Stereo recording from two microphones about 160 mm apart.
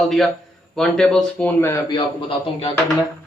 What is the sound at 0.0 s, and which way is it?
Speech, centre (ahead or behind).